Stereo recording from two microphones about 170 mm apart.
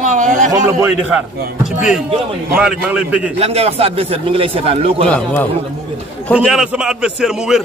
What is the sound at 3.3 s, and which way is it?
Speech, 40° right (ahead or behind).